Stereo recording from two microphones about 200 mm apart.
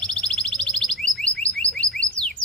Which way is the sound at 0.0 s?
5° left (ahead or behind).